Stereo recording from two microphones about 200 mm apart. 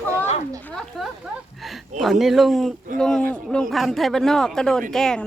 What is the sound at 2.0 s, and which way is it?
Speech, centre (ahead or behind).